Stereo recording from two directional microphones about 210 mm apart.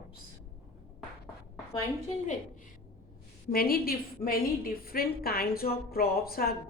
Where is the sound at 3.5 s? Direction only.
45° left (ahead or behind).